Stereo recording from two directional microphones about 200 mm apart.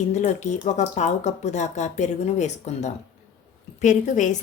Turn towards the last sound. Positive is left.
turn(degrees=40)  # may be behind; listen again after turning